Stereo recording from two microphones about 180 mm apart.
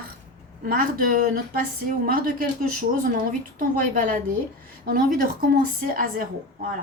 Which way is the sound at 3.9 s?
50° right (ahead or behind).